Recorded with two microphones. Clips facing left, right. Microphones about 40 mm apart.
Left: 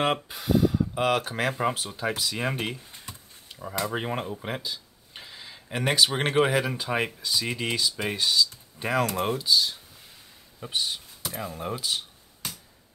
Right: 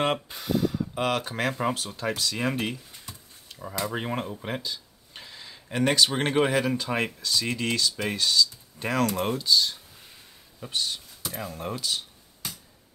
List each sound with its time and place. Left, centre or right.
0.0 s speech: centre
3.9 s speech: centre
10.6 s speech: centre